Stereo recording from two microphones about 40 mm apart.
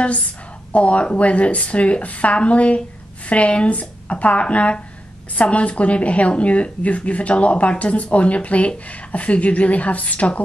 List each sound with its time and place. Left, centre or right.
0.7 s speech: left